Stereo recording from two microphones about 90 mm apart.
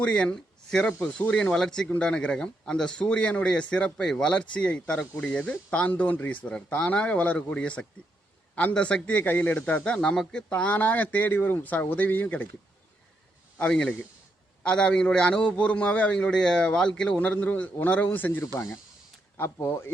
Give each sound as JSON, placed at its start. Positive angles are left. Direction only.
{"t": 0.0, "sound": "a man's voice", "side_deg": 10}
{"t": 13.6, "sound": "a man's voice", "side_deg": 10}